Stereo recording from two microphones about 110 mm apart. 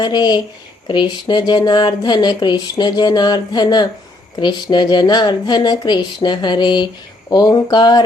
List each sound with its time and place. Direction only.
0.0 s speech: 40° left (ahead or behind)